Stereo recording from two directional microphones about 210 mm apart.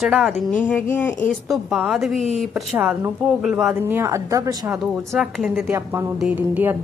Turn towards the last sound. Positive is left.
turn(degrees=-10)  # may be behind; listen again after turning